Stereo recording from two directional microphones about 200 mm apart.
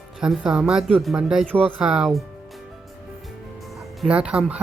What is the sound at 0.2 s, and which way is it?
Speech, 5° right (ahead or behind).